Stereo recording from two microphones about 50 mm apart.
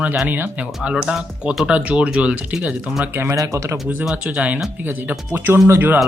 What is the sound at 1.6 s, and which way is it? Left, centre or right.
Speech, right.